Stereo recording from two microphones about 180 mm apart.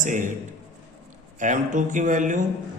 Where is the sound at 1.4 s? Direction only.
45° right (ahead or behind).